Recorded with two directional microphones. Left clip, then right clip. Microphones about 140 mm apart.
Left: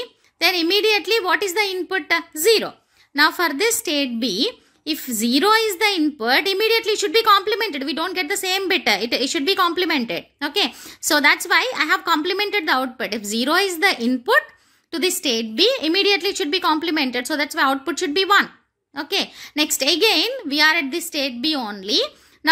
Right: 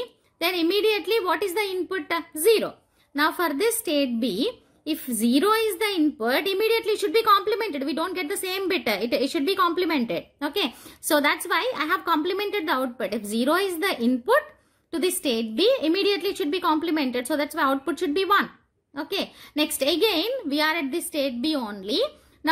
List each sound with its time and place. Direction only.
0.0 s a woman's voice: 20° left (ahead or behind)